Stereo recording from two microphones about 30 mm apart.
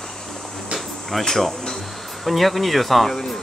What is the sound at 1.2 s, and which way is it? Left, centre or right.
Speech, centre.